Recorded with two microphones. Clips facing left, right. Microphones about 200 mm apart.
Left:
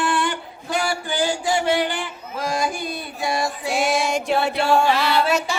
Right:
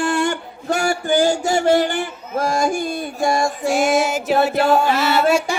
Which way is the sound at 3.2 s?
45° right (ahead or behind).